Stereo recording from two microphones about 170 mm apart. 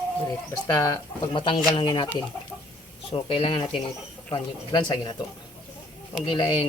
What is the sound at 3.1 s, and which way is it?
Speech, 35° left (ahead or behind).